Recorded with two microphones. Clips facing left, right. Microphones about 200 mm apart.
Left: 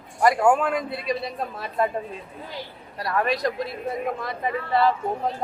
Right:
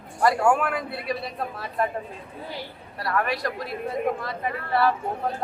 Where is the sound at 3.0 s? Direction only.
20° left (ahead or behind).